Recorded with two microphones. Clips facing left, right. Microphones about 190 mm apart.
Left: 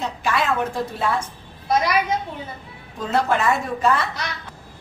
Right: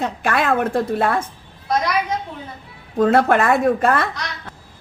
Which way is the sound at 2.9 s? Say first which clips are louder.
Right 7 dB; 55° right (ahead or behind).